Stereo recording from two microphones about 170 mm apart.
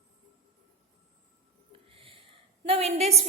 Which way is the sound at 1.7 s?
30° right (ahead or behind).